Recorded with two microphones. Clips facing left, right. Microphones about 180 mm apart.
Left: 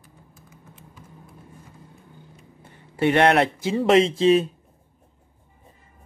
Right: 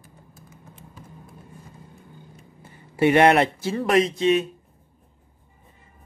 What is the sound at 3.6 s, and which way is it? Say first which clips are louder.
Speech: left 3 dB; 20° left (ahead or behind).